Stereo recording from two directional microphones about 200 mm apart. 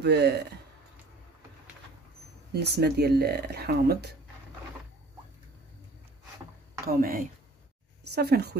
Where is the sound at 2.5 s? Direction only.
55° right (ahead or behind).